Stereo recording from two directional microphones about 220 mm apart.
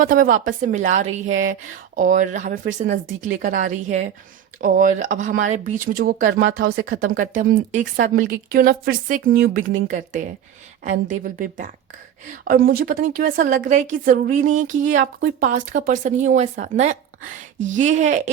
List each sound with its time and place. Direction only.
0.0 s speech: 40° right (ahead or behind)
15.0 s a woman's voice: 55° right (ahead or behind)
15.4 s speech: 35° right (ahead or behind)